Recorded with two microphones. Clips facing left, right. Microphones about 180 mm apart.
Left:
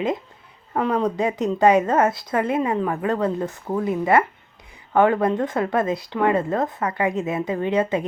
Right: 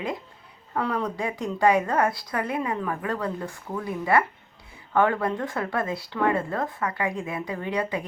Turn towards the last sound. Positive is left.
turn(degrees=25)  # may be behind; listen again after turning